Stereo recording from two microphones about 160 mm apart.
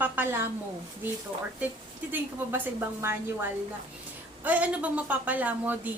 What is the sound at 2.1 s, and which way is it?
A woman's voice, 10° right (ahead or behind).